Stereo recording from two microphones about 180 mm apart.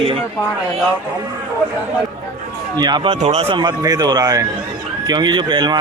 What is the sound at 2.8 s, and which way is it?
Speech, 25° right (ahead or behind).